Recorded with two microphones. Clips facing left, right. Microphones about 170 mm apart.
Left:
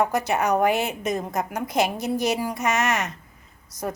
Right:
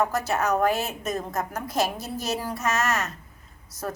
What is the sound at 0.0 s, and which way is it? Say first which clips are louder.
A woman's voice: left 2 dB; 15° left (ahead or behind).